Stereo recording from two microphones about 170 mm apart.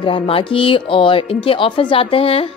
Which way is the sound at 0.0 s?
30° left (ahead or behind).